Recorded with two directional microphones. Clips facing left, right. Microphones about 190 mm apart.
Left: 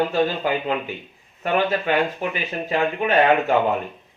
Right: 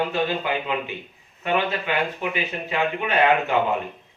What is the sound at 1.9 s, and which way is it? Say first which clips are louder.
A man's voice: left 3 dB; 45° left (ahead or behind).